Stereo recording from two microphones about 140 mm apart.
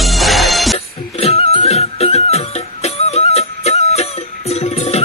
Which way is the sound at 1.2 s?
45° left (ahead or behind).